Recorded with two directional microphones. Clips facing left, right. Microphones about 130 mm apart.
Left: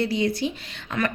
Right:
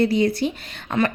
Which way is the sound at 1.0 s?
30° right (ahead or behind).